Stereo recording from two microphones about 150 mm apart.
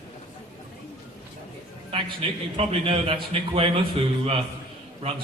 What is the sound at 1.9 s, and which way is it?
A man's voice, 40° right (ahead or behind).